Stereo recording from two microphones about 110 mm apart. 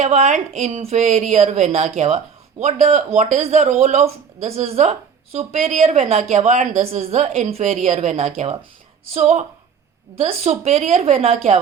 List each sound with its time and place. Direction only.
0.0 s a woman's voice: 90° right
10.2 s a woman's voice: 70° right (ahead or behind)